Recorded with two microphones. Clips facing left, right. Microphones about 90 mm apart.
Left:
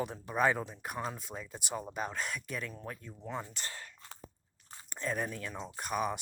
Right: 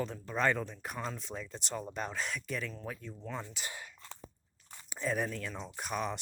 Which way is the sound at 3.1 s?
15° left (ahead or behind).